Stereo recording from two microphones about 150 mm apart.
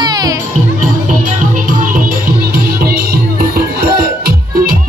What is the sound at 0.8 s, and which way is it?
Music, 60° right (ahead or behind).